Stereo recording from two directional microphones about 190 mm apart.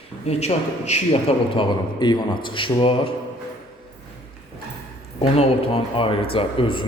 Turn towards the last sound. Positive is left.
turn(degrees=25)  # may be behind; listen again after turning